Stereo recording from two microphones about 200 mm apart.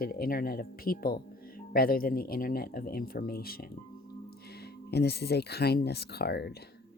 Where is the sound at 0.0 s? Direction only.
45° left (ahead or behind).